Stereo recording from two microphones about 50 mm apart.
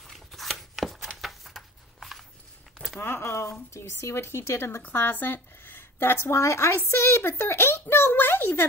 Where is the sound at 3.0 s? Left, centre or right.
Left.